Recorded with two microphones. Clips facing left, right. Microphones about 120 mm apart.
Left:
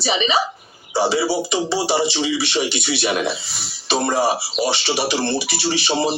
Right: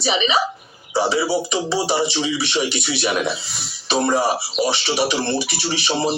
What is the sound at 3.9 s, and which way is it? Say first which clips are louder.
Speech: even; 30° left (ahead or behind).